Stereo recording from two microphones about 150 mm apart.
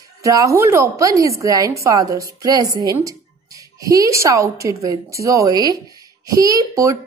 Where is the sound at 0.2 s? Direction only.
20° right (ahead or behind).